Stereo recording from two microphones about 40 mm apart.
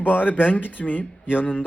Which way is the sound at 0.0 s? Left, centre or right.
Left.